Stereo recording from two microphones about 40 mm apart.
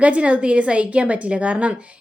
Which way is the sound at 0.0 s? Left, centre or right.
Right.